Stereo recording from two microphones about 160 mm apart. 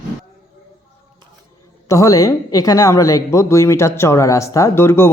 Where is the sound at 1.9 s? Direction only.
20° left (ahead or behind).